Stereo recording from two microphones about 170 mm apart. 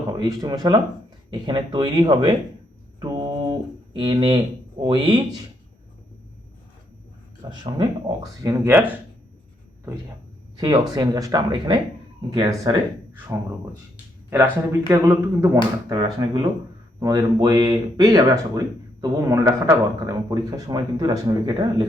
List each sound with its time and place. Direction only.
0.2 s speech: 25° right (ahead or behind)
3.0 s a sound: 25° right (ahead or behind)
4.8 s speech: 30° right (ahead or behind)
7.5 s speech: 25° right (ahead or behind)
10.6 s speech: 25° right (ahead or behind)
15.9 s speech: 25° right (ahead or behind)